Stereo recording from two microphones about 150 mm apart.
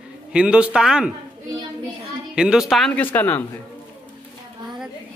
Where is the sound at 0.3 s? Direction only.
5° right (ahead or behind).